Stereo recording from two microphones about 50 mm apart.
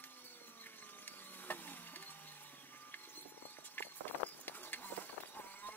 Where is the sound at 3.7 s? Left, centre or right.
Left.